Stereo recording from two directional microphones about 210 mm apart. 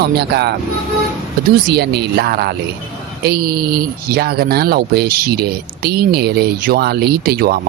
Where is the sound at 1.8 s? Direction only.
50° right (ahead or behind).